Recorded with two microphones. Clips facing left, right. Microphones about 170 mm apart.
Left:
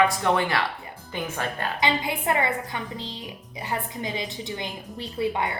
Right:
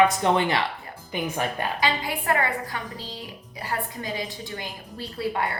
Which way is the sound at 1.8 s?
20° left (ahead or behind).